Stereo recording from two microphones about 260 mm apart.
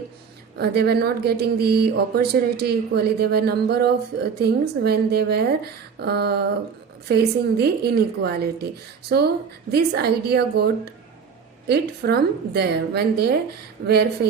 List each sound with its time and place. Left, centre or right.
0.6 s speech: right